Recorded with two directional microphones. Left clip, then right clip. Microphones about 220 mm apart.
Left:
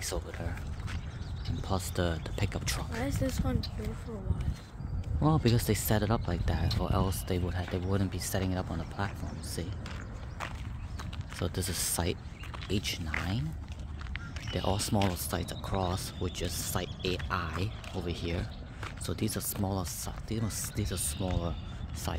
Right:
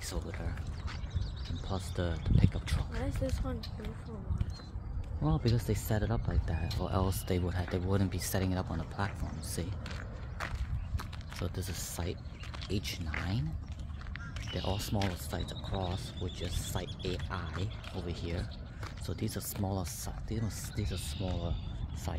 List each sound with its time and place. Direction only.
0.0 s speech: 15° left (ahead or behind)
1.7 s speech: 20° left (ahead or behind)
3.0 s speech: 40° left (ahead or behind)
5.2 s speech: 25° left (ahead or behind)
6.8 s speech: centre (ahead or behind)
11.4 s speech: 30° left (ahead or behind)
12.6 s speech: 15° left (ahead or behind)
14.5 s speech: 25° left (ahead or behind)
21.2 s speech: 35° left (ahead or behind)